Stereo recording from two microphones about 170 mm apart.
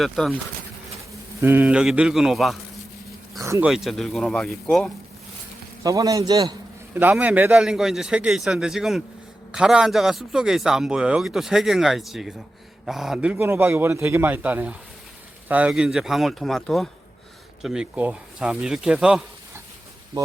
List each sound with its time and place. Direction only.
0.0 s a man's voice: centre (ahead or behind)
1.4 s a man's voice: 10° right (ahead or behind)
3.4 s speech: 15° right (ahead or behind)
3.7 s a man's voice: centre (ahead or behind)
5.8 s a man's voice: 20° right (ahead or behind)
6.9 s a man's voice: 10° right (ahead or behind)